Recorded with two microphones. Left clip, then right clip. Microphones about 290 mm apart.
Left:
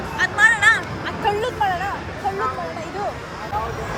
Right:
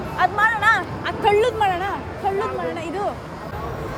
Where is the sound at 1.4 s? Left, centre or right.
Right.